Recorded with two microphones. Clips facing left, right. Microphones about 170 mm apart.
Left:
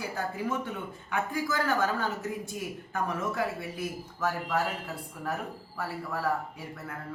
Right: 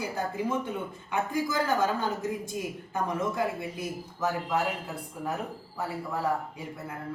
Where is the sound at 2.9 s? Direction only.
15° right (ahead or behind).